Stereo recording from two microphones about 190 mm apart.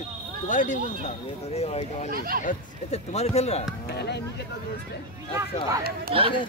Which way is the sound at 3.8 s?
60° left (ahead or behind).